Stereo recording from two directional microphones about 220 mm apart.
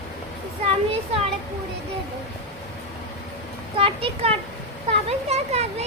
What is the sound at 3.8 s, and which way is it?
A child's voice, 25° right (ahead or behind).